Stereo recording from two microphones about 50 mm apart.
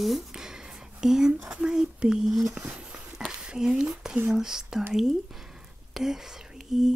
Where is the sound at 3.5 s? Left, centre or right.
Centre.